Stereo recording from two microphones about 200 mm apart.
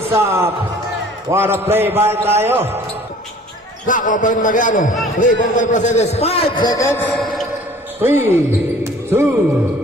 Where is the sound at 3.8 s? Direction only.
40° left (ahead or behind); by 7.2 s 5° left (ahead or behind).